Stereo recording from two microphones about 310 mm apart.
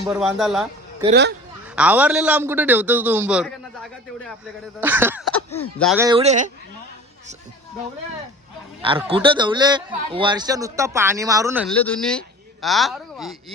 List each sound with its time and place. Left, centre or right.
0.1 s a man's voice: centre
1.7 s a man's voice: centre
4.8 s a sound: centre
5.8 s a man's voice: centre
6.1 s speech: centre
8.8 s a man's voice: centre